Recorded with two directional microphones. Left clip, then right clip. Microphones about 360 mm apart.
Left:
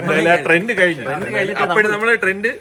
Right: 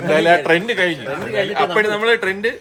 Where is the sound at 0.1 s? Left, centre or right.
Right.